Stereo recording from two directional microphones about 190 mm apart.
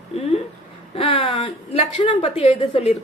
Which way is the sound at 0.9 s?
30° left (ahead or behind).